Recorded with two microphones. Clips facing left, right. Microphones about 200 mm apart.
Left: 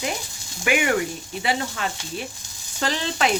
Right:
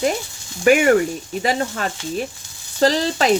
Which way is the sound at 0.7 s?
40° right (ahead or behind).